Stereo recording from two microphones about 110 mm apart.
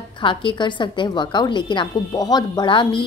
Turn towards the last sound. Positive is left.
turn(degrees=50)  # may be behind; listen again after turning